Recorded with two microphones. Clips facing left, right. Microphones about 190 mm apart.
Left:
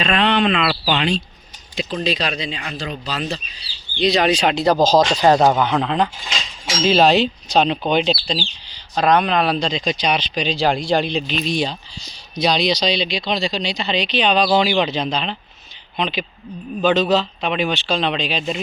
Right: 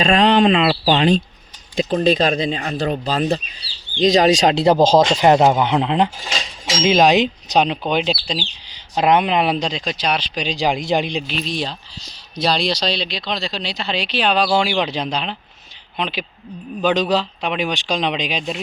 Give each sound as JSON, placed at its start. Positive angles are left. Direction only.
{"t": 0.0, "sound": "speech", "side_deg": -40}
{"t": 0.6, "sound": "speech", "side_deg": -30}
{"t": 1.8, "sound": "speech", "side_deg": -45}
{"t": 4.6, "sound": "a man's voice", "side_deg": -25}
{"t": 6.3, "sound": "cutlery", "side_deg": -30}
{"t": 6.8, "sound": "speech", "side_deg": -15}
{"t": 9.0, "sound": "a man's voice", "side_deg": -20}